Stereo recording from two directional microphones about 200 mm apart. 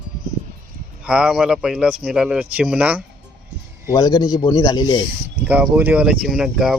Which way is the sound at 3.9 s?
20° left (ahead or behind).